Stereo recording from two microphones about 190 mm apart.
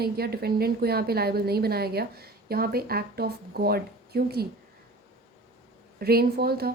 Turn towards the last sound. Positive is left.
turn(degrees=-55)  # may be behind; listen again after turning